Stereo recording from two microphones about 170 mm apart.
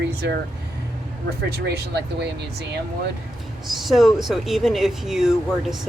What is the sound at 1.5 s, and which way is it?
Speech, 75° right (ahead or behind).